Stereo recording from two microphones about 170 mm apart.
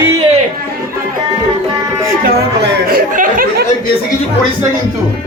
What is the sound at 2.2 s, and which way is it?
Speech, 65° right (ahead or behind).